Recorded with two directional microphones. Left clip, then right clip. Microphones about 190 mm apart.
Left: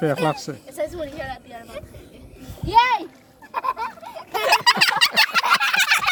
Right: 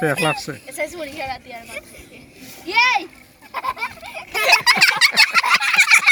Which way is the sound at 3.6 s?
10° right (ahead or behind).